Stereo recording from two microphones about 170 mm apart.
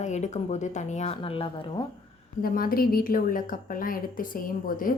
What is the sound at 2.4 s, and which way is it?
A woman's voice, 60° left (ahead or behind).